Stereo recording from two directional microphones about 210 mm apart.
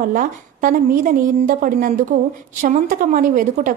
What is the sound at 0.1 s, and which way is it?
A woman's voice, 40° right (ahead or behind).